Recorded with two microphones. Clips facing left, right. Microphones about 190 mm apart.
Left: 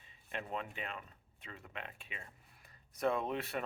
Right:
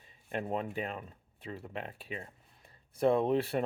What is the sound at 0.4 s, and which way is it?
Speech, 35° right (ahead or behind).